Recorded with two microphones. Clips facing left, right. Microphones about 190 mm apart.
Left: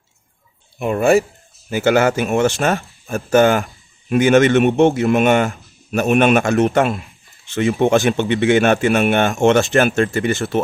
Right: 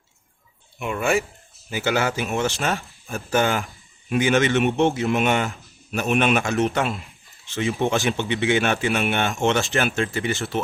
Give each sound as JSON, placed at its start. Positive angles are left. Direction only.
{"t": 0.8, "sound": "a man's voice", "side_deg": 40}